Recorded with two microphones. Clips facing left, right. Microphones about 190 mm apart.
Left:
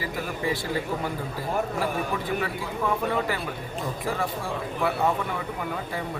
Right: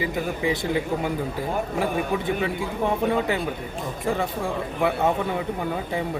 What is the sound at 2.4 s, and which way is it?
A man's voice, 20° right (ahead or behind).